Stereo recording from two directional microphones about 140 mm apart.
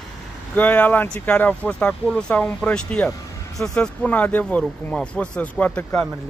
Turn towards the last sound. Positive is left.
turn(degrees=10)  # may be behind; listen again after turning